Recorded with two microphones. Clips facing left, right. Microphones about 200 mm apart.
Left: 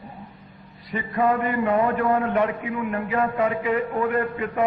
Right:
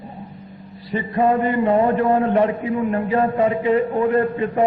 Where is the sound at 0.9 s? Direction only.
30° right (ahead or behind).